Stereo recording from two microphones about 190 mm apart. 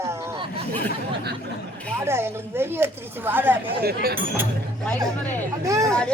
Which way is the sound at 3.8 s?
55° right (ahead or behind).